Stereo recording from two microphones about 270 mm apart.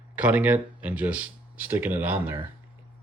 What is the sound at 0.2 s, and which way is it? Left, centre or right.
Speech, centre.